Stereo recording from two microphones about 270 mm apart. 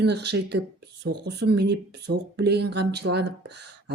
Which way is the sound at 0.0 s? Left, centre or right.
Right.